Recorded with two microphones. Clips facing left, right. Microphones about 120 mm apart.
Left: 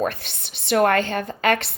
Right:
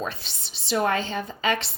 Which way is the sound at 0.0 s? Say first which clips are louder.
Left 7 dB; 60° left (ahead or behind).